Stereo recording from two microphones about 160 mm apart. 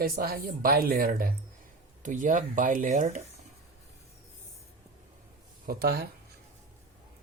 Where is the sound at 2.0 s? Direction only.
55° right (ahead or behind).